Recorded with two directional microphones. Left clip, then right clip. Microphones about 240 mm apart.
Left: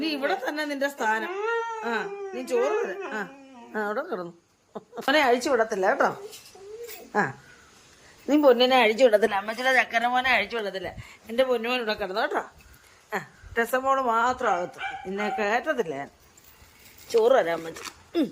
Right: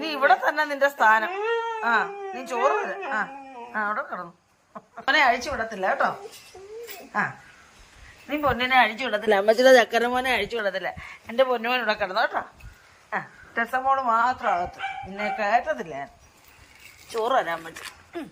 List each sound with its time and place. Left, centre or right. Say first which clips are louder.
0.0 s a woman's voice: right 7 dB; centre
7.1 s speech: left 1 dB; centre; by 9.2 s left
9.3 s speech: right 7 dB; right; by 10.6 s centre
10.6 s speech: right 5 dB; centre
17.1 s speech: left 3 dB; centre